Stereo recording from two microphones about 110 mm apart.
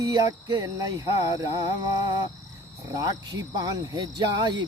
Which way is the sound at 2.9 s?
35° right (ahead or behind).